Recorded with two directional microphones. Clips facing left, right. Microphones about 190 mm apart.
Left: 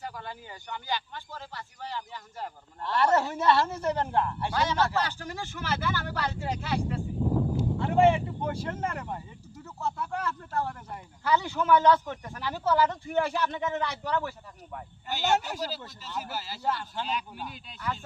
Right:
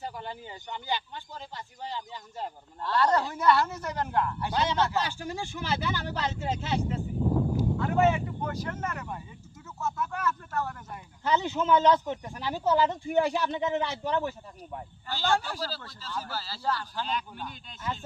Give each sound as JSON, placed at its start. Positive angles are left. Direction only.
{"t": 0.0, "sound": "speech", "side_deg": -20}
{"t": 2.8, "sound": "speech", "side_deg": 25}
{"t": 4.9, "sound": "speech", "side_deg": -15}
{"t": 7.5, "sound": "speech", "side_deg": 30}
{"t": 9.8, "sound": "a sound", "side_deg": 30}
{"t": 11.2, "sound": "speech", "side_deg": -20}
{"t": 15.0, "sound": "speech", "side_deg": 20}
{"t": 17.1, "sound": "speech", "side_deg": 10}